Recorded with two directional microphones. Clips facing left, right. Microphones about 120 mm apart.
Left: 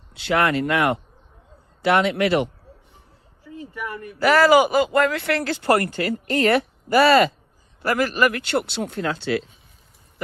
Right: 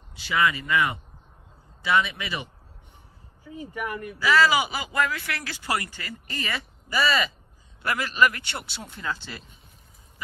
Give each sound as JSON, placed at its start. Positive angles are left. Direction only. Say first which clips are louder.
{"t": 0.1, "sound": "a man's voice", "louder": "left 5 dB", "side_deg": 65}
{"t": 4.2, "sound": "speech", "louder": "left 7 dB", "side_deg": 55}
{"t": 7.8, "sound": "speech", "louder": "left 4 dB", "side_deg": 45}